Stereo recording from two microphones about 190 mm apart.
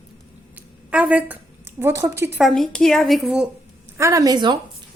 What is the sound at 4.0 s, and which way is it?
Speech, 15° right (ahead or behind).